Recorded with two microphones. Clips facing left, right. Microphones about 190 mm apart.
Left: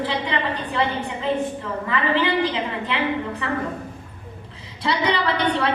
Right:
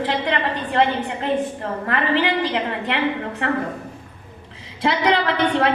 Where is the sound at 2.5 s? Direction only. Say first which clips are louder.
Right 2 dB; 65° right (ahead or behind).